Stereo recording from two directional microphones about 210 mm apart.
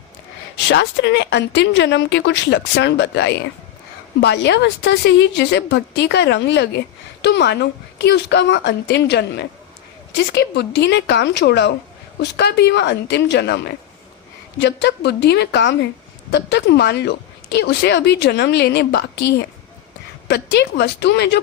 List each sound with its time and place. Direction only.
0.7 s a woman's voice: 55° left (ahead or behind)
20.2 s speech: 55° left (ahead or behind)